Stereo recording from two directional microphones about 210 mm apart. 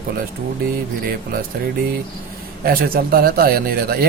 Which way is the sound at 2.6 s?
45° right (ahead or behind).